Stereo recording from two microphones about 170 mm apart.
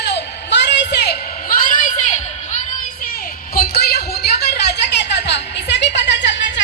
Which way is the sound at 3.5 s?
70° left (ahead or behind).